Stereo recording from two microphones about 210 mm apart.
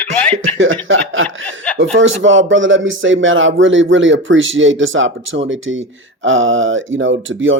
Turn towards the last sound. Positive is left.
turn(degrees=-65)  # may be behind; listen again after turning